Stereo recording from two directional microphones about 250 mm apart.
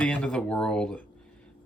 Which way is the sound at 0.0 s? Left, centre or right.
Centre.